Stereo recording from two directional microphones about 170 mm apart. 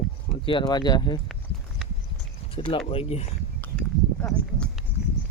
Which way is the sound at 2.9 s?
35° left (ahead or behind).